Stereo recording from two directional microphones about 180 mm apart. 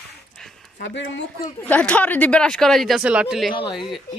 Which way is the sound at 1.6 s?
10° left (ahead or behind).